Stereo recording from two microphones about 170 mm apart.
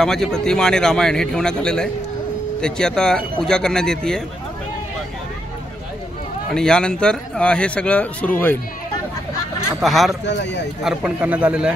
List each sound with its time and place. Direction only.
0.0 s a man's voice: 5° left (ahead or behind)
6.5 s a man's voice: 5° left (ahead or behind)
9.8 s a man's voice: centre (ahead or behind)
10.2 s speech: 90° left
10.8 s a man's voice: 5° right (ahead or behind)